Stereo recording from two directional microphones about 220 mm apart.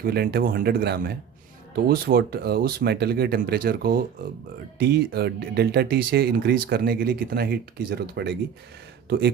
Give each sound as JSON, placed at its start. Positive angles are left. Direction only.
{"t": 0.0, "sound": "speech", "side_deg": -45}